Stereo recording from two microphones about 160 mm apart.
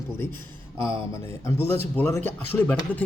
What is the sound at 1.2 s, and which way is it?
A man's voice, 15° left (ahead or behind).